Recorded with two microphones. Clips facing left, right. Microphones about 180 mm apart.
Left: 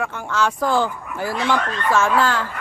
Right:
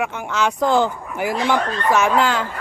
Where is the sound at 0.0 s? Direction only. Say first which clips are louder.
Right 1 dB; 20° right (ahead or behind).